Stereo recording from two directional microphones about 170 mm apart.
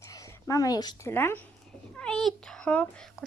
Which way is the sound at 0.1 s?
20° left (ahead or behind).